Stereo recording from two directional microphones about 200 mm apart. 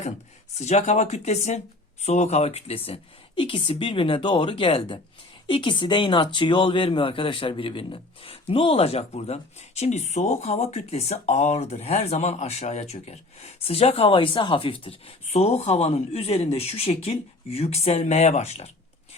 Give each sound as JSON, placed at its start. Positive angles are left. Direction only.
{"t": 0.6, "sound": "speech", "side_deg": 35}